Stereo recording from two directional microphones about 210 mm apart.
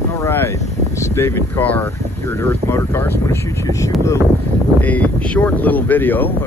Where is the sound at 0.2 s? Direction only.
10° left (ahead or behind).